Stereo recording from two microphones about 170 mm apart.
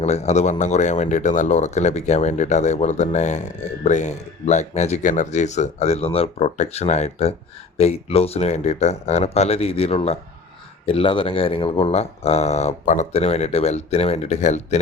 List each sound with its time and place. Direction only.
0.0 s speech: 40° left (ahead or behind)